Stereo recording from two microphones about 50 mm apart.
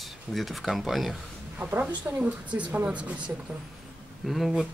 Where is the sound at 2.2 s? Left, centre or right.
Right.